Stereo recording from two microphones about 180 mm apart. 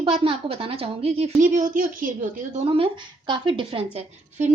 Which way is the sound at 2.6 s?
30° right (ahead or behind).